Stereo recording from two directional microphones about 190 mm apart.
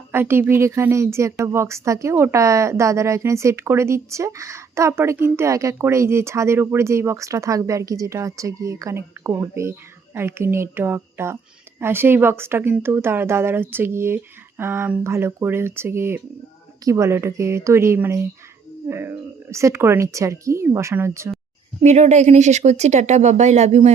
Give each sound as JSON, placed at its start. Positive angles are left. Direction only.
{"t": 0.1, "sound": "speech", "side_deg": -10}
{"t": 21.8, "sound": "speech", "side_deg": -35}